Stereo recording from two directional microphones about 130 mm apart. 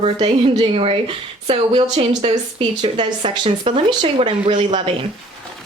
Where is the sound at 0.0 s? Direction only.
50° right (ahead or behind).